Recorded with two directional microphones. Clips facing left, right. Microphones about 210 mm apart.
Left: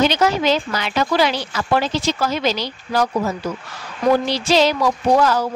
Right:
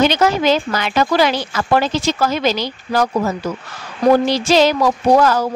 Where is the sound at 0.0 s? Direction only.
50° right (ahead or behind).